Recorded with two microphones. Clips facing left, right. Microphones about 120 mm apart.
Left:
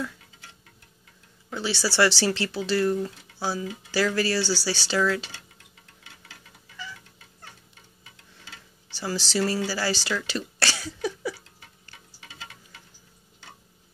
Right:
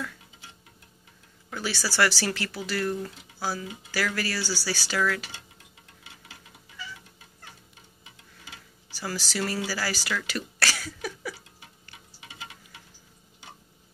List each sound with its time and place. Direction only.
1.5 s speech: 25° left (ahead or behind)
8.9 s speech: 30° left (ahead or behind)
9.7 s a sound: 25° left (ahead or behind)
12.2 s wind chime: 15° right (ahead or behind)